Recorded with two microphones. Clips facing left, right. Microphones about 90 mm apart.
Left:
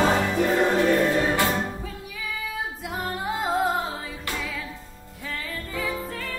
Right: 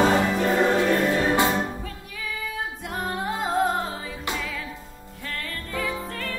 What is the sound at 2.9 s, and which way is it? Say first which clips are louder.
Music: right 1 dB; centre (ahead or behind).